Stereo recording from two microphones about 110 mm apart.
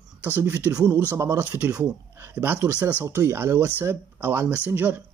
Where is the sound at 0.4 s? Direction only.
25° right (ahead or behind).